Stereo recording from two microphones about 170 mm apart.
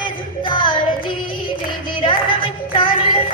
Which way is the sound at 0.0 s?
30° left (ahead or behind).